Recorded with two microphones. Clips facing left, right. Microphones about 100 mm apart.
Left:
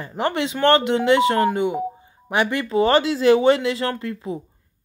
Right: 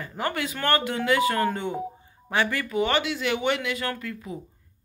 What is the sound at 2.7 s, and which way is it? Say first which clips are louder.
Speech: left 8 dB; 35° left (ahead or behind).